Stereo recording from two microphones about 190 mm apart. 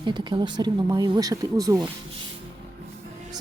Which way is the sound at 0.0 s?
25° right (ahead or behind).